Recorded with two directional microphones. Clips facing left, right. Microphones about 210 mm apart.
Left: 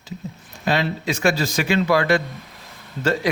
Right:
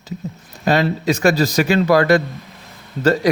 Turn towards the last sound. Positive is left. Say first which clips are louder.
# right 6 dB
turn(degrees=-40)  # may be behind; listen again after turning